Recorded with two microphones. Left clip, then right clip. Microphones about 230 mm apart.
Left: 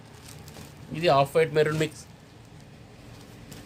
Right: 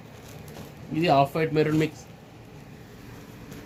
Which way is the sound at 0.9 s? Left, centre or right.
Left.